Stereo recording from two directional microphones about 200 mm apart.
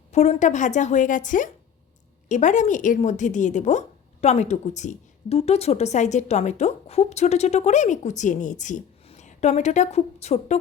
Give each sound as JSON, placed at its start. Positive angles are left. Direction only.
{"t": 0.1, "sound": "speech", "side_deg": 35}